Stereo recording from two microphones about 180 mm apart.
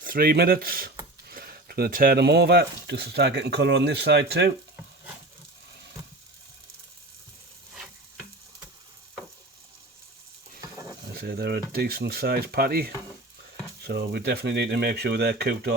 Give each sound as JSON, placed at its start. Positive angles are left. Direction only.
{"t": 0.0, "sound": "speech", "side_deg": -55}
{"t": 11.2, "sound": "speech", "side_deg": -60}